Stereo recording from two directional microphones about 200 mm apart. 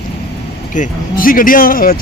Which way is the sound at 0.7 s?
40° left (ahead or behind).